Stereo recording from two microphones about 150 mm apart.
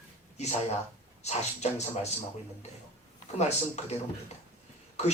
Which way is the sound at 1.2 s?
45° left (ahead or behind).